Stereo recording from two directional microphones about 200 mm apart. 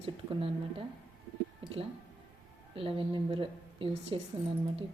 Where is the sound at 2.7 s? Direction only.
25° right (ahead or behind).